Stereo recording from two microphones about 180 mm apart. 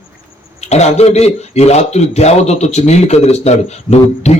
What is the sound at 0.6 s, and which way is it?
Speech, 35° left (ahead or behind).